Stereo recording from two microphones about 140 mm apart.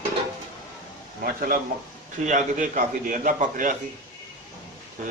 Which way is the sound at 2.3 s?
65° right (ahead or behind).